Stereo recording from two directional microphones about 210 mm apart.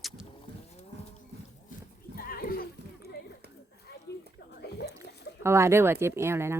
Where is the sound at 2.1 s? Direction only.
45° left (ahead or behind).